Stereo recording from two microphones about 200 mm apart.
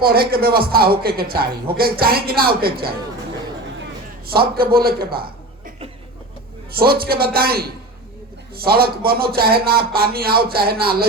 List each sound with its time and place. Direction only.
0.0 s a man's voice: 50° right (ahead or behind)
4.3 s a man's voice: 50° right (ahead or behind)
6.7 s a man's voice: 50° right (ahead or behind)